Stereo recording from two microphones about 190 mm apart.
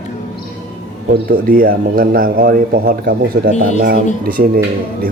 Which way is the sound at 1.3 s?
50° right (ahead or behind).